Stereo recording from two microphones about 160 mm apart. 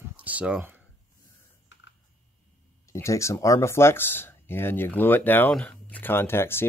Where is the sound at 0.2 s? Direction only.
10° right (ahead or behind).